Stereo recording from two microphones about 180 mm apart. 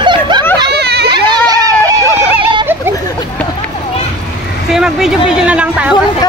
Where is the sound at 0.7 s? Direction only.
65° right (ahead or behind).